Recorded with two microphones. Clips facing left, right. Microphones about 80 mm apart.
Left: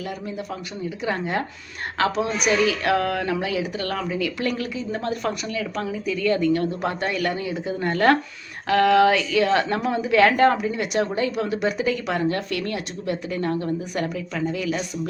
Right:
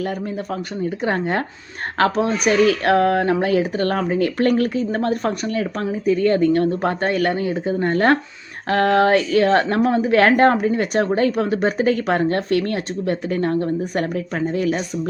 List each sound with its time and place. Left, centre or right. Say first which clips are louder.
0.5 s speech: right 6 dB; right